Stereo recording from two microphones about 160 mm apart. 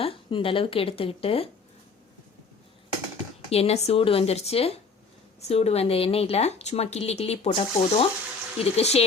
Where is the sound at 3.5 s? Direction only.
40° left (ahead or behind).